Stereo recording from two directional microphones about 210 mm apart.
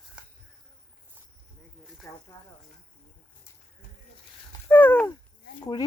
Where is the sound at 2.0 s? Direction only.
15° left (ahead or behind).